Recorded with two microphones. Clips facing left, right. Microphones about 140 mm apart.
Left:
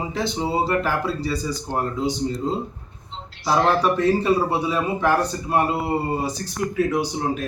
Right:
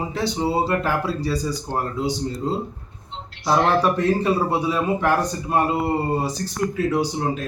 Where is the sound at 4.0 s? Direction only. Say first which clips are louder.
Left 1 dB; 10° right (ahead or behind).